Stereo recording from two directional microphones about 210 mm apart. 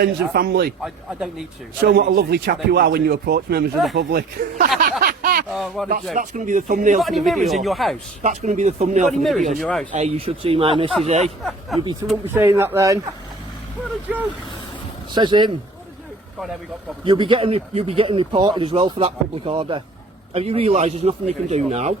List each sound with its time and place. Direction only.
0.0 s speech: 45° right (ahead or behind)
0.8 s speech: 5° right (ahead or behind)
1.8 s speech: 50° right (ahead or behind)
4.8 s a sound: 45° right (ahead or behind)
5.5 s speech: centre (ahead or behind)
6.1 s a man's voice: 40° right (ahead or behind)
7.3 s speech: centre (ahead or behind)
8.2 s a man's voice: 35° right (ahead or behind)
9.1 s speech: centre (ahead or behind)
9.9 s a man's voice: 30° right (ahead or behind)
11.7 s speech: centre (ahead or behind)
12.0 s speech: 10° right (ahead or behind)
15.1 s speech: 20° right (ahead or behind)
17.1 s a man's voice: 25° right (ahead or behind)